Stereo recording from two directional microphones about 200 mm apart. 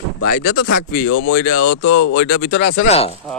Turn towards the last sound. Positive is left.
turn(degrees=30)  # may be behind; listen again after turning